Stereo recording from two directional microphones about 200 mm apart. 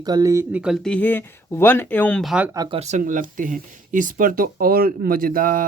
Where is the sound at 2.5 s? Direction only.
25° right (ahead or behind); by 5.6 s 45° right (ahead or behind).